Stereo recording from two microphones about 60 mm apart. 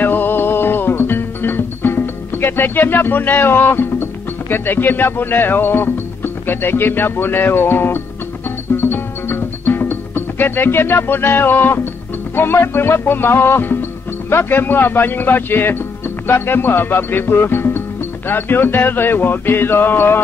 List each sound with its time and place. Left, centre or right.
0.0 s music: left